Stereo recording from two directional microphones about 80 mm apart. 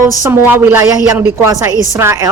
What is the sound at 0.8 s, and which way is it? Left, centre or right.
A woman's voice, right.